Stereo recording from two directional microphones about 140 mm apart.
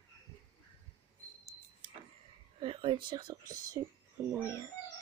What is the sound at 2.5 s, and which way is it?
Speech, 40° right (ahead or behind).